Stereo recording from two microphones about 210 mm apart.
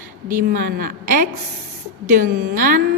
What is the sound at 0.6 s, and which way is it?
A woman's voice, 45° right (ahead or behind).